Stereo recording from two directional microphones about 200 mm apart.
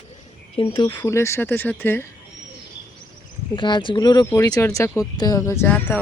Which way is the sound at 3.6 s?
25° left (ahead or behind).